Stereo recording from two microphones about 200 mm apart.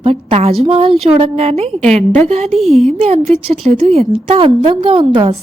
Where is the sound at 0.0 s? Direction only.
30° right (ahead or behind).